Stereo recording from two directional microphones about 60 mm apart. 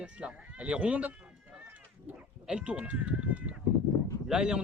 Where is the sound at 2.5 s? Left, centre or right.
Centre.